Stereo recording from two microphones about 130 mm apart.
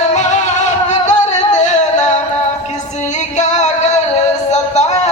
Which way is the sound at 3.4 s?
65° left (ahead or behind).